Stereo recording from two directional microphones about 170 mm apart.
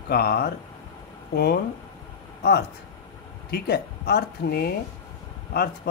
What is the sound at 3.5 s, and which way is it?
Speech, 65° left (ahead or behind).